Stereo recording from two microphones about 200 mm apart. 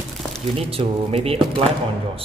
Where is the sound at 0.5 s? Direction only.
30° right (ahead or behind).